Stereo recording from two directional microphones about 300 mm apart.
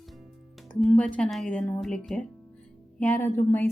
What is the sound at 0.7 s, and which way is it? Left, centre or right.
A woman's voice, centre.